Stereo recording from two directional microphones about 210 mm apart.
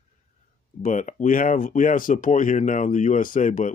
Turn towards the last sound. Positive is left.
turn(degrees=40)  # may be behind; listen again after turning